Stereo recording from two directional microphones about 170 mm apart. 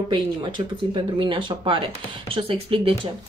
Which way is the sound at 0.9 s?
30° right (ahead or behind).